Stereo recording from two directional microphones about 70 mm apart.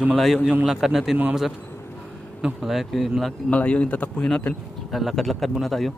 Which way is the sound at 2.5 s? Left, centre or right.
Centre.